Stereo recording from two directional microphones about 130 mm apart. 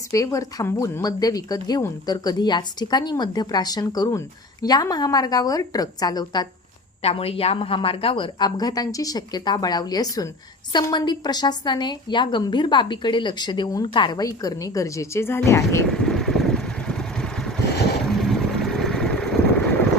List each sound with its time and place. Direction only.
0.1 s speech: 25° left (ahead or behind)
7.0 s speech: 50° left (ahead or behind); by 15.8 s 20° left (ahead or behind)
15.9 s vehicle: 5° left (ahead or behind)